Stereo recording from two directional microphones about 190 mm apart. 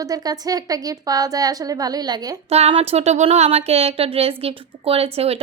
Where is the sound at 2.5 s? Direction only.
30° right (ahead or behind).